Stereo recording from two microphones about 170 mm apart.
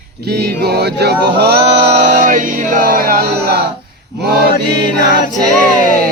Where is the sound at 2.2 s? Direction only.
50° right (ahead or behind); by 3.6 s 70° right (ahead or behind).